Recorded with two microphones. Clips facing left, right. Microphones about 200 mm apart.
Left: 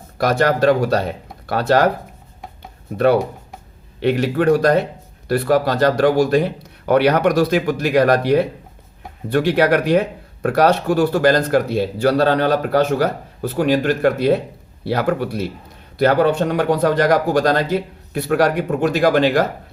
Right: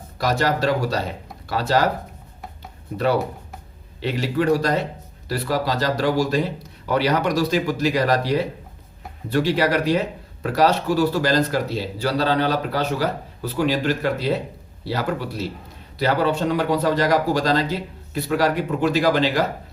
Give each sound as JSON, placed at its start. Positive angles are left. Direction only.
{"t": 0.2, "sound": "speech", "side_deg": 55}
{"t": 4.0, "sound": "speech", "side_deg": 55}